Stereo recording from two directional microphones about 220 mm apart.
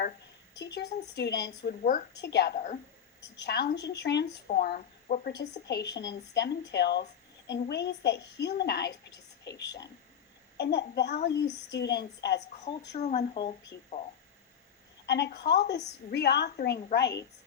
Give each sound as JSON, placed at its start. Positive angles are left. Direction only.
{"t": 0.6, "sound": "speech", "side_deg": 50}
{"t": 1.8, "sound": "speech", "side_deg": 40}
{"t": 5.3, "sound": "speech", "side_deg": 50}
{"t": 13.0, "sound": "speech", "side_deg": 30}
{"t": 15.0, "sound": "speech", "side_deg": 50}